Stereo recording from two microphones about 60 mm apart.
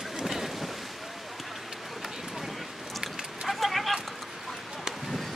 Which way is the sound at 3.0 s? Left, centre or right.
Centre.